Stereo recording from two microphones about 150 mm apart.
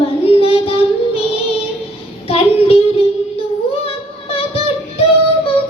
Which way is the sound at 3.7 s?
40° left (ahead or behind).